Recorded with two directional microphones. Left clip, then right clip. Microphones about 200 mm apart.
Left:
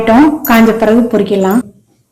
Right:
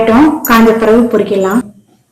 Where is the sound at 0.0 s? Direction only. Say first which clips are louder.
Even; 25° left (ahead or behind).